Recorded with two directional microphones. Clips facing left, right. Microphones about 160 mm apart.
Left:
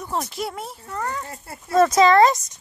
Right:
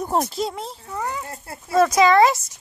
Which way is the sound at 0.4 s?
15° right (ahead or behind).